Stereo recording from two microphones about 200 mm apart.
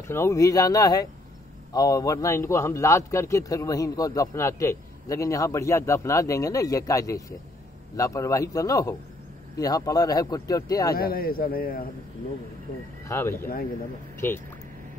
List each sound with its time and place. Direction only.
0.1 s a man's voice: 15° left (ahead or behind)
11.0 s a man's voice: 50° left (ahead or behind)
13.1 s a man's voice: 10° left (ahead or behind)